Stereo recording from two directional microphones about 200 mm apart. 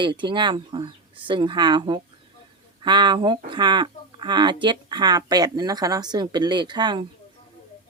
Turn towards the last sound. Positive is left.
turn(degrees=-20)  # may be behind; listen again after turning